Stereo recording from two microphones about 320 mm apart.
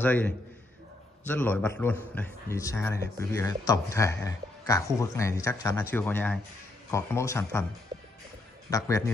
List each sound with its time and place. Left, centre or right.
0.0 s a man's voice: centre
7.9 s music: centre
8.6 s a man's voice: centre